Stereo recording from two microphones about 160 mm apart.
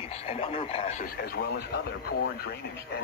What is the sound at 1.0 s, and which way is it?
Speech, 80° left.